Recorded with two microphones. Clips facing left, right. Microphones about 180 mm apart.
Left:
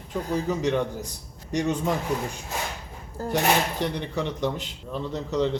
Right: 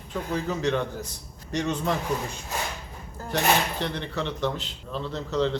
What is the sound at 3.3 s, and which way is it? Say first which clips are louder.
Speech: left 1 dB; 10° left (ahead or behind).